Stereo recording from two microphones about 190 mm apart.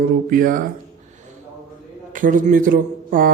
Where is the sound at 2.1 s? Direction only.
45° right (ahead or behind).